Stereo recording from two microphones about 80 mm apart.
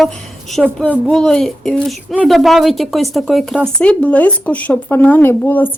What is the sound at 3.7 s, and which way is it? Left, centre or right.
Speech, centre.